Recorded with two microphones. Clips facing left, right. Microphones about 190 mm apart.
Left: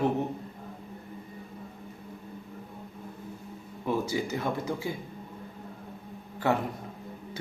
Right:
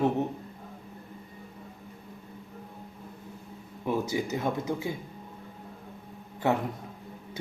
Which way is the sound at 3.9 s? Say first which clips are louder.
Even; 20° right (ahead or behind).